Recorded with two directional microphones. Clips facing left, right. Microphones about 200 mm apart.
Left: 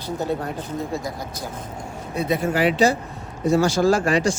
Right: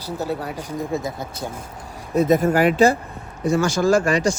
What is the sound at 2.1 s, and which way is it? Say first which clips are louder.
Speech: right 5 dB; 45° right (ahead or behind).